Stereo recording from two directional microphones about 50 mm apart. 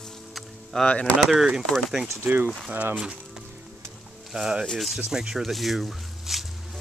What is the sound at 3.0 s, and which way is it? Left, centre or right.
Music, centre.